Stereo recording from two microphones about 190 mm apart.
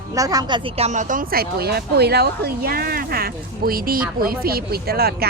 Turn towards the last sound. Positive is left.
turn(degrees=-55)  # may be behind; listen again after turning